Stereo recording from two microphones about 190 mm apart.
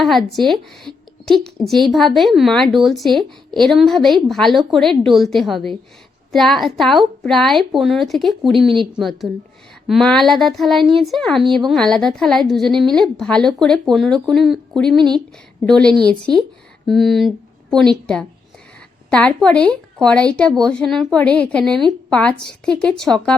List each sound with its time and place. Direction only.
0.0 s a woman's voice: centre (ahead or behind)
14.9 s a woman's voice: 25° right (ahead or behind)
15.6 s a woman's voice: 5° left (ahead or behind)